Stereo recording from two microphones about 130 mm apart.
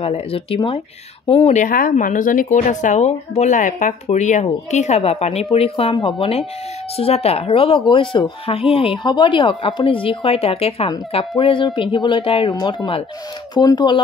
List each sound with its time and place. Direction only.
0.0 s speech: 50° left (ahead or behind)
1.5 s speech: 85° left; by 14.0 s 35° left (ahead or behind)